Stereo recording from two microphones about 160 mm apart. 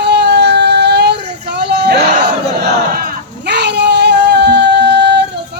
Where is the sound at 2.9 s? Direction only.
65° right (ahead or behind).